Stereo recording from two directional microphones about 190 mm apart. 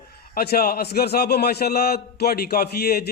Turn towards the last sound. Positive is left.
turn(degrees=55)  # may be behind; listen again after turning